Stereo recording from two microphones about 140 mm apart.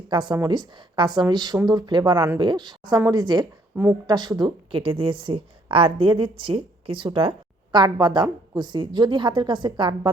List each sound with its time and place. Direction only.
0.1 s a woman's voice: 30° right (ahead or behind)